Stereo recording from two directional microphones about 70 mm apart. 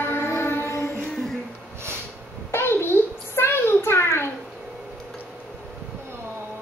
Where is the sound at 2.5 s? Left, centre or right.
Left.